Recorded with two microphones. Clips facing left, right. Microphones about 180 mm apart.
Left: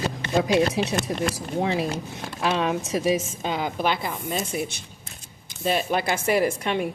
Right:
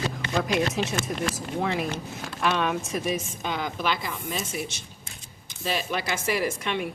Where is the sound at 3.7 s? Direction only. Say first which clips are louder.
Left 3 dB; 55° left (ahead or behind).